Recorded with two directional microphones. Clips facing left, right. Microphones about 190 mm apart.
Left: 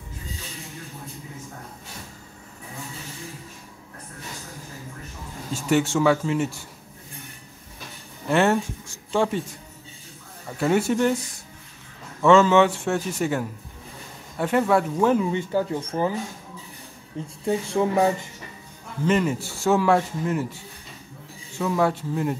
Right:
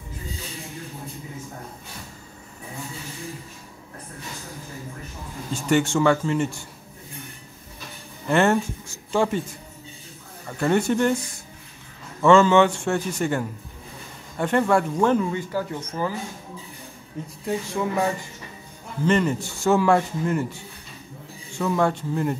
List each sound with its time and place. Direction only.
5.5 s a man's voice: 5° left (ahead or behind)
8.3 s speech: centre (ahead or behind)
10.6 s a man's voice: 5° left (ahead or behind)
15.2 s speech: 25° left (ahead or behind)
19.0 s a man's voice: 5° left (ahead or behind)
21.5 s a man's voice: 5° left (ahead or behind)